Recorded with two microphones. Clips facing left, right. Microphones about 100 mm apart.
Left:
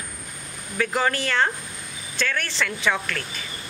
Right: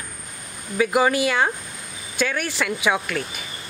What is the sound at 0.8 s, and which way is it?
Speech, 10° right (ahead or behind).